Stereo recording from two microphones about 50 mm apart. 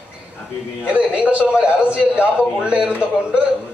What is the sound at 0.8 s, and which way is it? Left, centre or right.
A man's voice, right.